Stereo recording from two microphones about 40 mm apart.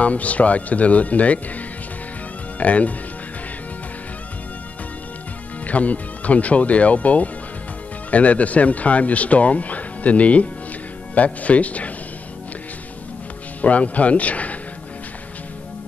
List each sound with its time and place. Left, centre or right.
0.0 s speech: left
2.6 s speech: left
5.7 s speech: left
13.6 s speech: left